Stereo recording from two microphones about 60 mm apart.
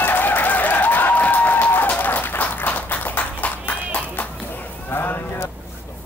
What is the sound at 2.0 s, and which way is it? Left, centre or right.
Clapping, left.